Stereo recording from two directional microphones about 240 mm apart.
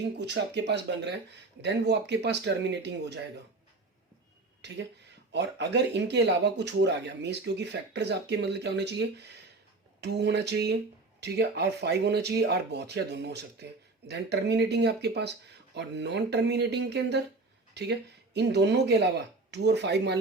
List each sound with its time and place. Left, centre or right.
0.2 s speech: right
4.6 s speech: right
18.3 s speech: right